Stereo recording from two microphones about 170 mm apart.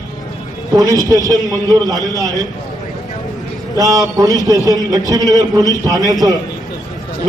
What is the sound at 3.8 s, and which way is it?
A man's voice, 20° right (ahead or behind).